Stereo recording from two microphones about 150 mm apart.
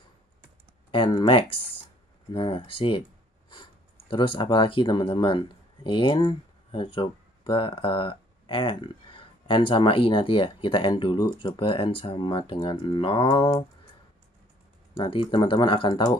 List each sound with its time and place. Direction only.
0.9 s speech: 35° left (ahead or behind)
4.1 s speech: 35° left (ahead or behind)
15.0 s speech: 35° left (ahead or behind)